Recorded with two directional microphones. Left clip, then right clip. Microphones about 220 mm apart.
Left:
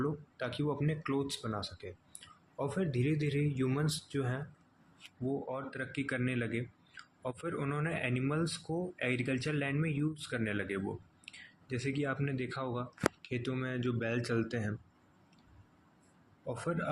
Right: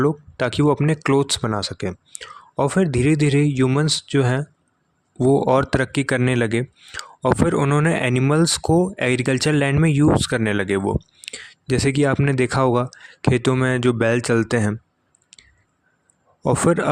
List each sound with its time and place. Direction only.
0.0 s speech: 50° right (ahead or behind)
16.5 s speech: 50° right (ahead or behind)